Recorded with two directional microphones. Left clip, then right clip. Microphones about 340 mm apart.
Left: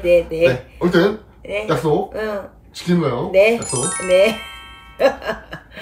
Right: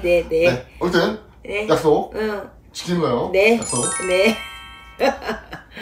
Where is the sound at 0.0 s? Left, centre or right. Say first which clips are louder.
Left 2 dB; centre.